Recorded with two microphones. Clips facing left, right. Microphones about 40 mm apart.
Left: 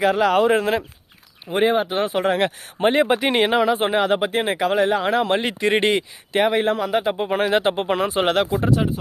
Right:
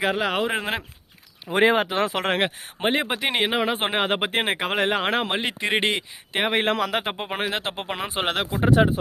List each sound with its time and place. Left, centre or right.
0.0 s speech: centre
0.6 s speech: right
1.5 s speech: right
2.8 s speech: centre
3.7 s speech: right
5.3 s speech: centre
6.5 s speech: right
7.0 s speech: right
7.4 s speech: centre
8.6 s speech: right